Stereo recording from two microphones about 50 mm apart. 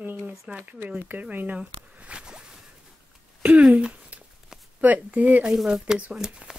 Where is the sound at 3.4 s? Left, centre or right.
Right.